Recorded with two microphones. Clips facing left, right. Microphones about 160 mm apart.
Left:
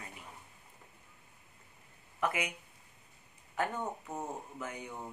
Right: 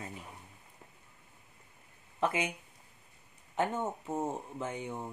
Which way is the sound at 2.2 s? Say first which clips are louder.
Right 3 dB; 25° right (ahead or behind).